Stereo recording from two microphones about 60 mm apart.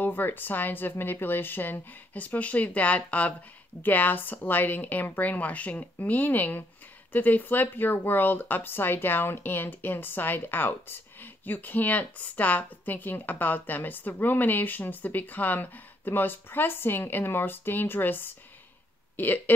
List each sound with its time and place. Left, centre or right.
0.0 s speech: left